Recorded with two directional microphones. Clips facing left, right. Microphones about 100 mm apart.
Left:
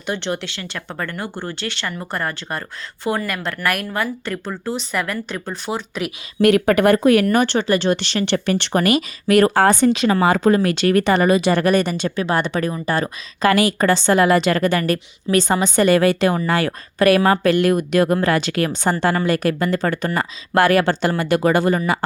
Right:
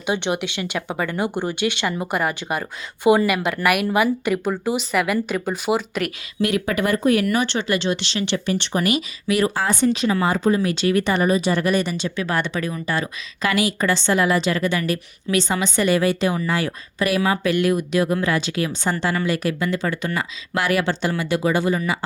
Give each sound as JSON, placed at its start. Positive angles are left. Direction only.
{"t": 0.0, "sound": "speech", "side_deg": -15}
{"t": 6.4, "sound": "speech", "side_deg": 60}
{"t": 7.3, "sound": "speech", "side_deg": 45}
{"t": 11.2, "sound": "a woman's voice", "side_deg": 70}
{"t": 12.2, "sound": "a woman's voice", "side_deg": 35}
{"t": 18.9, "sound": "a woman's voice", "side_deg": 50}